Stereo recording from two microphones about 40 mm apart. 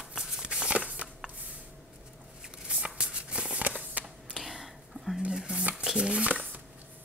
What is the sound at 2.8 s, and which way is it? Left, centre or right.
Shuffle, right.